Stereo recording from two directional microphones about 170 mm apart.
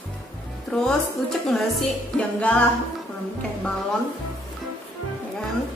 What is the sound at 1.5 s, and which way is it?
Music, centre (ahead or behind).